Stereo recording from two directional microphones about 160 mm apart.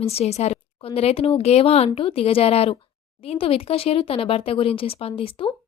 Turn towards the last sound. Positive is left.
turn(degrees=35)  # may be behind; listen again after turning